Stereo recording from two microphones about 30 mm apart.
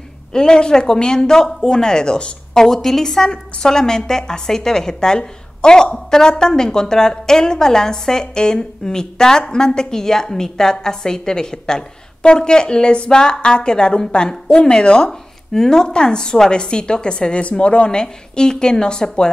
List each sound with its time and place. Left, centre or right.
0.3 s a woman's voice: left
2.5 s a woman's voice: centre
12.2 s a woman's voice: left
15.0 s a woman's voice: centre